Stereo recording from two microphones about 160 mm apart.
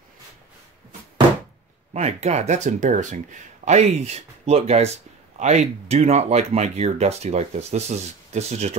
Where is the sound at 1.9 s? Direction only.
45° right (ahead or behind).